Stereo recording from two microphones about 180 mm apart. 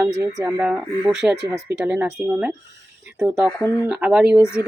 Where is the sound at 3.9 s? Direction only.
5° right (ahead or behind).